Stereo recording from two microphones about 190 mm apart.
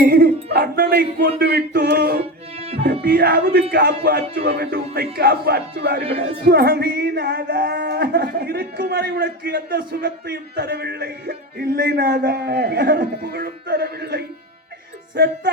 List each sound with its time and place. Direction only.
0.5 s music: 55° right (ahead or behind)
2.6 s music: 30° right (ahead or behind)
3.0 s music: 55° right (ahead or behind)